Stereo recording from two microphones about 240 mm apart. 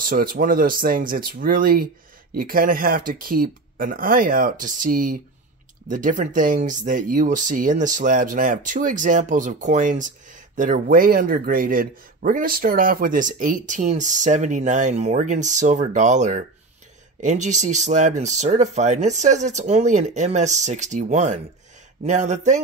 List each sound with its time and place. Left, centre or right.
0.0 s speech: right